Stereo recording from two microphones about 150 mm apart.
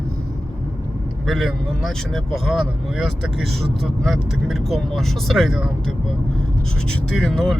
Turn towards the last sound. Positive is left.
turn(degrees=5)  # may be behind; listen again after turning